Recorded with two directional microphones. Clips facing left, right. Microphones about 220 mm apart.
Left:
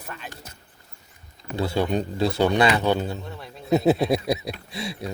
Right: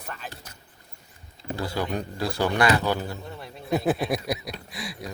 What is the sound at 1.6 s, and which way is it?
Speech, 25° left (ahead or behind).